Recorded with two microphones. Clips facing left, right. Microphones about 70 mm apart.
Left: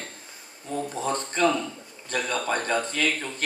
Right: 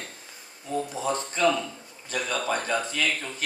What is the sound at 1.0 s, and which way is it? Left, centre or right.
Speech, left.